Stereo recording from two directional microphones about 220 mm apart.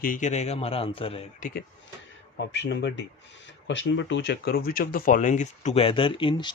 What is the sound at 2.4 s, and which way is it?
Speech, 50° left (ahead or behind).